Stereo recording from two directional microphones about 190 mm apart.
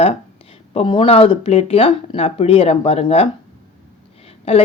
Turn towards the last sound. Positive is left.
turn(degrees=30)  # may be behind; listen again after turning